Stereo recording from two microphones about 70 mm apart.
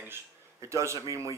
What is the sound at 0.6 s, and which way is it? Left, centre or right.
Speech, right.